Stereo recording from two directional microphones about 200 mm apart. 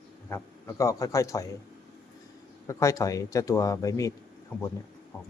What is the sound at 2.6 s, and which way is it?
Speech, 15° left (ahead or behind).